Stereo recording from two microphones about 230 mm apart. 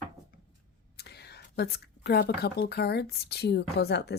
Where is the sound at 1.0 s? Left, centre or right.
Left.